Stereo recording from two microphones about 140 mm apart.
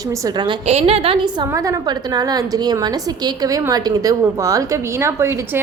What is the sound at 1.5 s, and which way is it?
A woman's voice, 25° right (ahead or behind).